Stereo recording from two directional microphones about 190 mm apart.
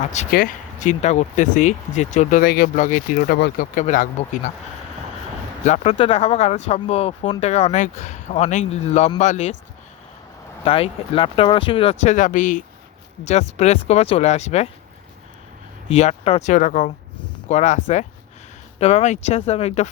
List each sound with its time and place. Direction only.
0.0 s speech: 40° left (ahead or behind)
5.6 s speech: 35° left (ahead or behind)
10.6 s speech: 30° left (ahead or behind)
15.9 s speech: 35° left (ahead or behind)